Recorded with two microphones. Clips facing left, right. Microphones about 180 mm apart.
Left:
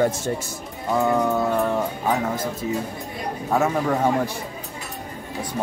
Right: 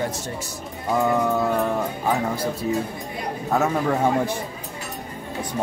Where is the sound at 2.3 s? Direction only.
10° right (ahead or behind).